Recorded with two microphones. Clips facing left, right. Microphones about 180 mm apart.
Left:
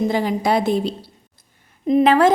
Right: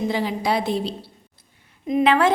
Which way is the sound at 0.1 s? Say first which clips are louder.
Left 4 dB; 45° left (ahead or behind).